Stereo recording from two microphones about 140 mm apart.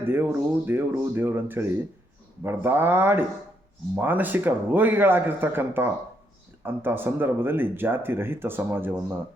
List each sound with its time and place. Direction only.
0.0 s speech: 15° right (ahead or behind)